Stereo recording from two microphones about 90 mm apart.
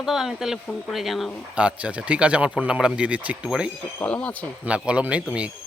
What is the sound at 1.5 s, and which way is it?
Speech, 10° right (ahead or behind).